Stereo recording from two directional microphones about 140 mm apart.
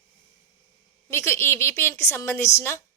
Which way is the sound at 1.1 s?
20° left (ahead or behind).